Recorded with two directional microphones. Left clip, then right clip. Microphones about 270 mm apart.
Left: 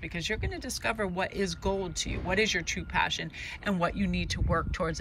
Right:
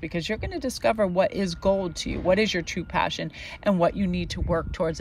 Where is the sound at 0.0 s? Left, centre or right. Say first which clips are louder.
Right 4 dB; centre.